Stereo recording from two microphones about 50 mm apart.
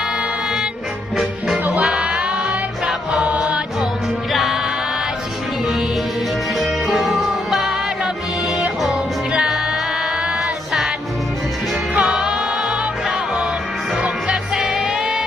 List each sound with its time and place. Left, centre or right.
1.1 s music: centre
1.8 s music: centre
4.3 s music: centre
6.6 s music: centre
11.9 s music: centre
14.5 s music: centre